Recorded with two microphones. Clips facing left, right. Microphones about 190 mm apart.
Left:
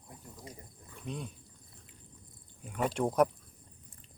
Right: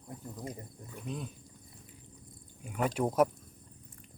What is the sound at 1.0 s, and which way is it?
Speech, centre (ahead or behind).